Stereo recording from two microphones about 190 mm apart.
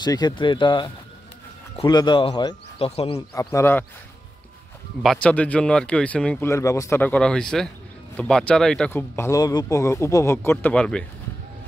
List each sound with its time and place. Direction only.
0.0 s speech: 20° left (ahead or behind)
3.2 s speech: 20° left (ahead or behind)
5.0 s speech: 5° left (ahead or behind)